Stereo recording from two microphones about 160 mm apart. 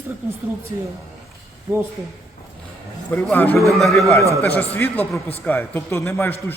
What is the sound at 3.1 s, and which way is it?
Speech, 10° left (ahead or behind).